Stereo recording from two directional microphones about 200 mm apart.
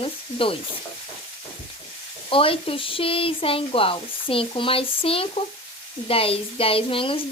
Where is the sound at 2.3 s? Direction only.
25° left (ahead or behind).